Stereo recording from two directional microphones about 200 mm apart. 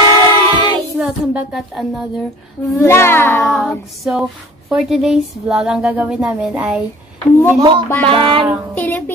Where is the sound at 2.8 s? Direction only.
15° left (ahead or behind).